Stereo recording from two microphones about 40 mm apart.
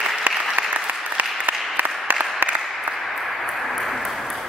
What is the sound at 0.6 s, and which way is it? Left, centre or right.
Applause, right.